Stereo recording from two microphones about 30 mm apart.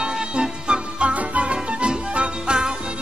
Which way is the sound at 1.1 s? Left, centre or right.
Right.